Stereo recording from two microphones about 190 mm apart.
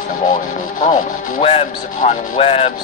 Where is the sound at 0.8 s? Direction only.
35° left (ahead or behind).